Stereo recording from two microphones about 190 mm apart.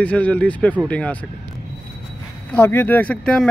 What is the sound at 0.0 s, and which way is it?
Speech, 5° left (ahead or behind).